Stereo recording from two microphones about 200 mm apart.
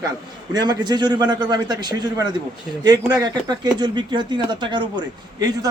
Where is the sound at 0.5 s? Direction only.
20° right (ahead or behind).